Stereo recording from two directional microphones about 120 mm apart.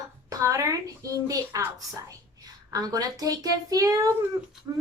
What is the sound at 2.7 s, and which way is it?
A woman's voice, 30° right (ahead or behind).